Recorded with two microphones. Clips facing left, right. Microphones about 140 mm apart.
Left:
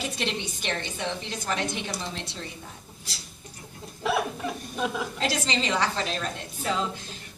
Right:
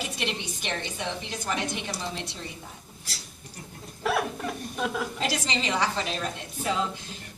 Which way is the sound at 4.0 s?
5° left (ahead or behind).